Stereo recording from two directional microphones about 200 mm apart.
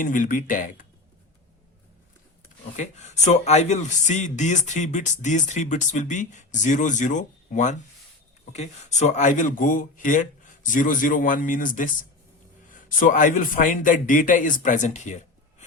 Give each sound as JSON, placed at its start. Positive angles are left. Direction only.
{"t": 0.0, "sound": "speech", "side_deg": 40}
{"t": 3.2, "sound": "a man's voice", "side_deg": 35}